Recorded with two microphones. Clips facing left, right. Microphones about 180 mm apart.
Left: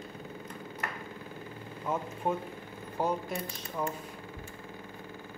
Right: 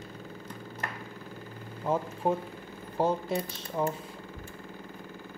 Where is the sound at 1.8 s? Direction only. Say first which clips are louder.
Right 4 dB; 30° right (ahead or behind).